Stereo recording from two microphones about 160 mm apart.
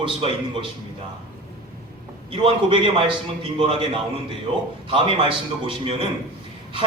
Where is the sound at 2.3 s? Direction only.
35° right (ahead or behind).